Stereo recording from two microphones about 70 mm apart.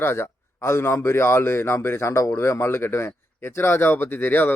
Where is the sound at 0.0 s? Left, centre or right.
Left.